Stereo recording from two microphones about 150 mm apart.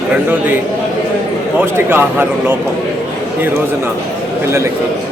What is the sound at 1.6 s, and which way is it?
Speech, 15° right (ahead or behind).